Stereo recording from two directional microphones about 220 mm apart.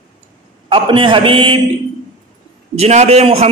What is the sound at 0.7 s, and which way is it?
Speech, 25° right (ahead or behind).